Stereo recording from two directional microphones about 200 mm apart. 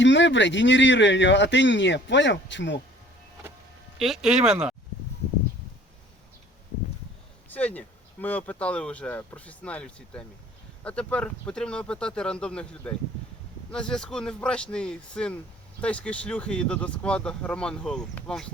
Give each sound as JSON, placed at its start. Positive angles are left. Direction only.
{"t": 0.0, "sound": "speech", "side_deg": 65}
{"t": 3.9, "sound": "speech", "side_deg": 0}
{"t": 7.5, "sound": "speech", "side_deg": 5}